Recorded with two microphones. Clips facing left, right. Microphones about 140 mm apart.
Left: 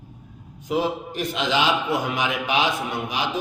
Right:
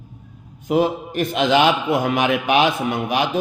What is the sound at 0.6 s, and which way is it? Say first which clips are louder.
A man's voice: right 5 dB; 55° right (ahead or behind).